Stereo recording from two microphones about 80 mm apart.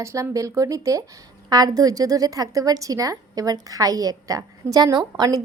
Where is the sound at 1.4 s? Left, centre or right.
Right.